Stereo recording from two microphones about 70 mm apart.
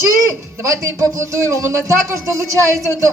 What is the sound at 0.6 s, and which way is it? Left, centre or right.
Speech, right.